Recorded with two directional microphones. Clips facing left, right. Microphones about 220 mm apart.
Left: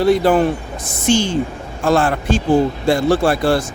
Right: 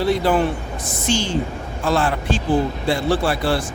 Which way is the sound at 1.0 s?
50° left (ahead or behind).